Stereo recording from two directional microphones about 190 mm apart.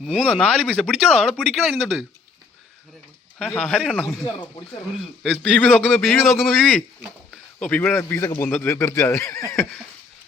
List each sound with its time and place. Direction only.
0.0 s speech: 5° left (ahead or behind)
3.3 s speech: 10° left (ahead or behind)
4.3 s speech: 25° left (ahead or behind)
5.2 s speech: 5° left (ahead or behind)